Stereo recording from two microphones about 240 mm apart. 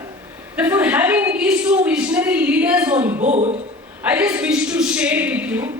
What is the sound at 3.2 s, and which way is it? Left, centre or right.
Speech, right.